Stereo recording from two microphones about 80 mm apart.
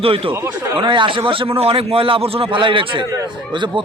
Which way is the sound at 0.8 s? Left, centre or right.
Right.